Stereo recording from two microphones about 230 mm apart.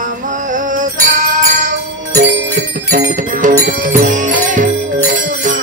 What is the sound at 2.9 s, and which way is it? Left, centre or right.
Music, right.